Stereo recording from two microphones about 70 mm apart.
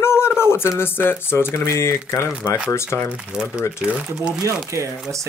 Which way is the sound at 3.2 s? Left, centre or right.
Centre.